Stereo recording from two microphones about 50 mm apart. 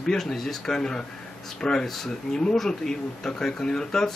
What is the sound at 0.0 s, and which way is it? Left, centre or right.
Speech, centre.